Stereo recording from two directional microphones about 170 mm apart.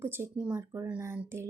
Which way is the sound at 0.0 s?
15° right (ahead or behind).